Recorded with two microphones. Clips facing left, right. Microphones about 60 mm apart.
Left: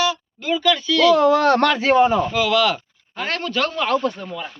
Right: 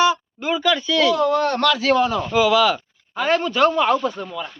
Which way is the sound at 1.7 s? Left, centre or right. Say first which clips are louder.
Left 2 dB; left.